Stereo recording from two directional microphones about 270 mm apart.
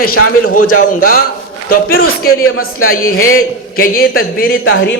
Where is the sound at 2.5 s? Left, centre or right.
Left.